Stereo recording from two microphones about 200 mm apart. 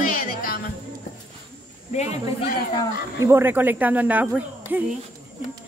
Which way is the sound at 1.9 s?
35° left (ahead or behind).